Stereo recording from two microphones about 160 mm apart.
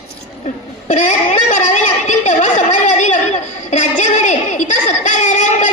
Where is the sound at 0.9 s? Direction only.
50° left (ahead or behind).